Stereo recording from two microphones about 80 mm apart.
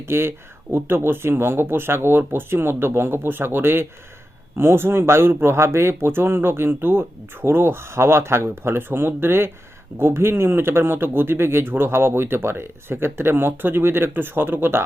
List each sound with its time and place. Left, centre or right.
0.0 s speech: right